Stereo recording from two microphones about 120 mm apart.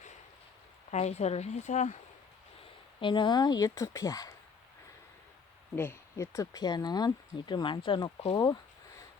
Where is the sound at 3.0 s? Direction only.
40° left (ahead or behind).